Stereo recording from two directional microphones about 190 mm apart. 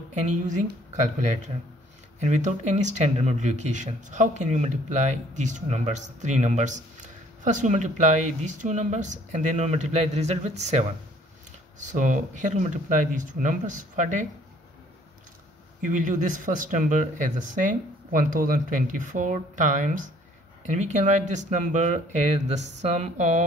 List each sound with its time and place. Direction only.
2.1 s speech: 40° right (ahead or behind)
15.8 s speech: 45° right (ahead or behind)